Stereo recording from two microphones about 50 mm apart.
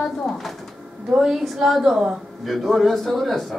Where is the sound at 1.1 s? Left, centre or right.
Centre.